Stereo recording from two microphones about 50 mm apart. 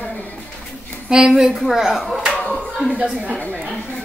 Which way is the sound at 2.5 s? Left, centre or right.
Centre.